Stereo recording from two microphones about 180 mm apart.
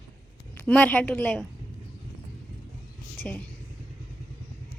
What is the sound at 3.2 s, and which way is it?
Speech, 5° left (ahead or behind).